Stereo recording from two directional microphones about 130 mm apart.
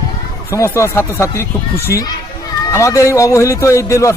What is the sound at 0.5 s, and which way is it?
Speech, 20° left (ahead or behind).